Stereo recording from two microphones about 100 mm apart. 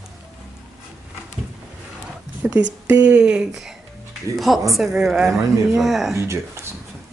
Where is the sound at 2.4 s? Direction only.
15° right (ahead or behind).